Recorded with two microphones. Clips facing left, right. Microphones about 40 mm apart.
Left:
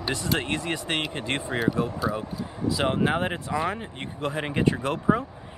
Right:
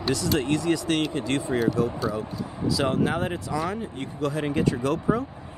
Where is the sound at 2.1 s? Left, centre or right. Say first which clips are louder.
Right 1 dB; left.